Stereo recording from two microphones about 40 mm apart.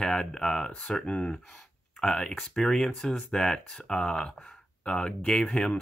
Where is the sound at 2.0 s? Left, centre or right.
Centre.